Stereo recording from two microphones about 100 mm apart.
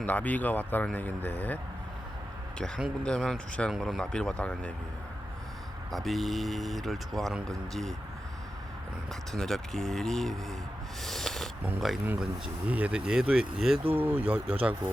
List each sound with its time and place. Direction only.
0.0 s speech: 15° left (ahead or behind)
2.6 s speech: 10° left (ahead or behind)
3.7 s speech: centre (ahead or behind)
5.9 s speech: centre (ahead or behind)
9.3 s speech: 5° left (ahead or behind)
11.0 s a sound: 5° left (ahead or behind)
11.8 s speech: centre (ahead or behind)
12.2 s speech: 15° right (ahead or behind)
13.9 s speech: 20° right (ahead or behind)